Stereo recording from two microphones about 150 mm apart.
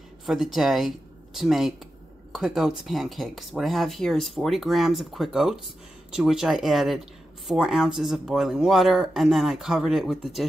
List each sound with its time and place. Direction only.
0.3 s speech: centre (ahead or behind)